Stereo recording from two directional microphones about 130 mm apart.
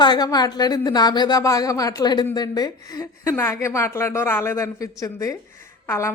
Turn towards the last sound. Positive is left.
turn(degrees=20)  # may be behind; listen again after turning